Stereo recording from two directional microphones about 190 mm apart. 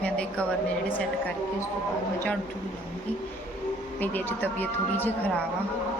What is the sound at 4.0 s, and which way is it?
A woman's voice, 10° left (ahead or behind).